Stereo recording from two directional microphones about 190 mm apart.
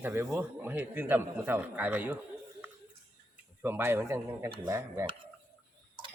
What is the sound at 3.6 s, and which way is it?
Speech, 10° right (ahead or behind).